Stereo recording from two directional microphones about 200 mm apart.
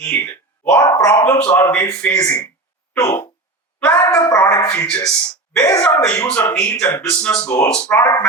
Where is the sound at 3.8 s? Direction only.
10° left (ahead or behind).